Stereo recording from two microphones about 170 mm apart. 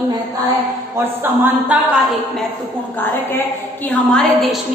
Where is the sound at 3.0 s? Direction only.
10° left (ahead or behind).